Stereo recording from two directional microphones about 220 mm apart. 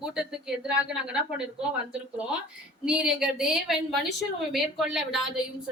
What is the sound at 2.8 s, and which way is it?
A woman's voice, 5° right (ahead or behind).